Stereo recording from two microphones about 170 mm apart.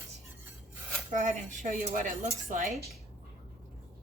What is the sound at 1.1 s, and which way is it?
Speech, 45° right (ahead or behind).